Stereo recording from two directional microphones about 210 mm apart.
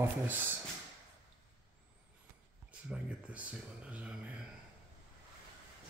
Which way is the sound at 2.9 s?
5° right (ahead or behind).